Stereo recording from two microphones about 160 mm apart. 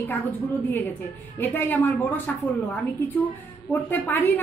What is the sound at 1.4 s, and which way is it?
A woman's voice, 10° left (ahead or behind).